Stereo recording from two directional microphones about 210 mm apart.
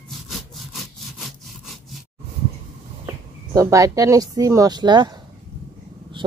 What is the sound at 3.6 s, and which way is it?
Speech, 15° right (ahead or behind).